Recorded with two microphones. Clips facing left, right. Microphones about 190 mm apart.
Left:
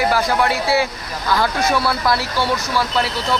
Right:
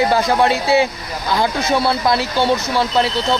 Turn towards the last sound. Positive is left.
turn(degrees=-25)  # may be behind; listen again after turning